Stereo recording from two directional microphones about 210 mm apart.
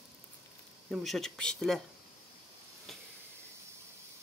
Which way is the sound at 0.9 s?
Centre (ahead or behind).